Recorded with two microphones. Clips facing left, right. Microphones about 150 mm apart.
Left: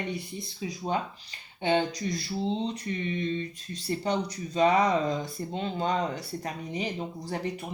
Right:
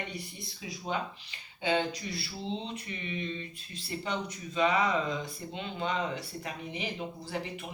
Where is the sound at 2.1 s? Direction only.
40° left (ahead or behind).